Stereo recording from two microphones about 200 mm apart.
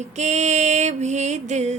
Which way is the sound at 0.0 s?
35° right (ahead or behind).